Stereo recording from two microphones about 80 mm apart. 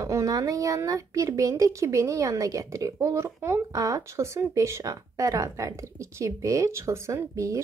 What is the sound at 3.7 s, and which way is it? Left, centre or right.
Speech, right.